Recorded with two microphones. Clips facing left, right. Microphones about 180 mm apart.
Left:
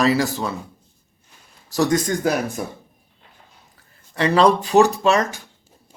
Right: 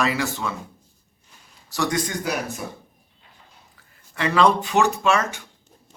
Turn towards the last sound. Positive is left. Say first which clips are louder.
# left 3 dB
turn(degrees=35)  # may be behind; listen again after turning